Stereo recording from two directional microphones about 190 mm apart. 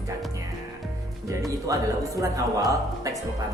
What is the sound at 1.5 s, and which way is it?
Speech, 15° right (ahead or behind).